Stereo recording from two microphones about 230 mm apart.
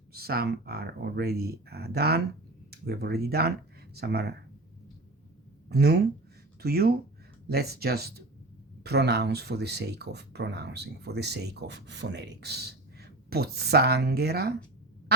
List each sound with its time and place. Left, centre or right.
0.1 s speech: right
5.6 s speech: right